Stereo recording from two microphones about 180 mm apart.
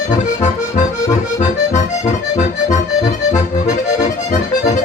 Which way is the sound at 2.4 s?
45° left (ahead or behind).